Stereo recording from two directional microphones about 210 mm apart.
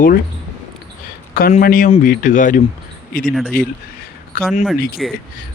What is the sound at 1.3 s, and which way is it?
Speech, 45° left (ahead or behind).